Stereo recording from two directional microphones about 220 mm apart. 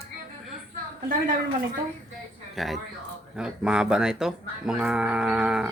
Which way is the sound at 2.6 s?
Centre (ahead or behind).